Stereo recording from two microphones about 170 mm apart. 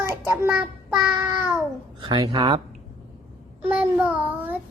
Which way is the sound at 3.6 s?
5° right (ahead or behind).